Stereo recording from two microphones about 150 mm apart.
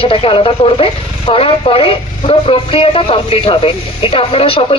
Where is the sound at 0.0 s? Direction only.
35° left (ahead or behind).